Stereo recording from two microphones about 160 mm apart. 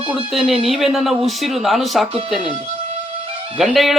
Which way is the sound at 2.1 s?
35° right (ahead or behind).